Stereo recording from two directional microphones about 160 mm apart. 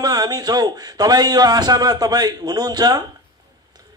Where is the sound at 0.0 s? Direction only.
25° right (ahead or behind).